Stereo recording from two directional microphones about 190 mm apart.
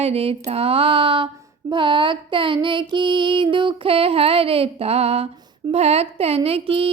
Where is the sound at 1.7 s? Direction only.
25° right (ahead or behind).